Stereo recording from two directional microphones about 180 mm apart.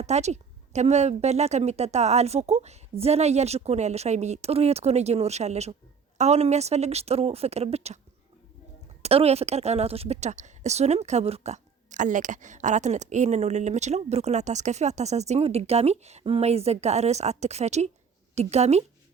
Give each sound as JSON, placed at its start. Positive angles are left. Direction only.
{"t": 0.0, "sound": "a woman's voice", "side_deg": -40}
{"t": 9.0, "sound": "a woman's voice", "side_deg": -35}